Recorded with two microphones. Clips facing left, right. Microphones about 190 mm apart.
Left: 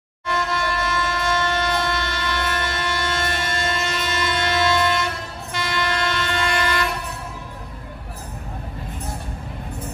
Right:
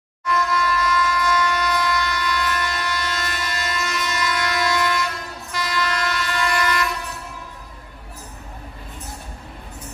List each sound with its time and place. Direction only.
0.2 s train: 25° left (ahead or behind)